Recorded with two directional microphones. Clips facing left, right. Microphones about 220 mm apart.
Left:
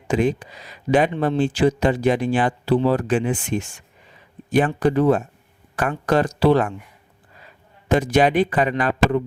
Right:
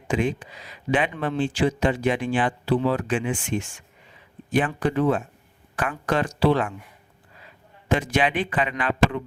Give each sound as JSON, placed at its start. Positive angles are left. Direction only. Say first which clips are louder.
{"t": 0.1, "sound": "speech", "louder": "left 4 dB", "side_deg": 40}
{"t": 7.9, "sound": "speech", "louder": "left 5 dB", "side_deg": 40}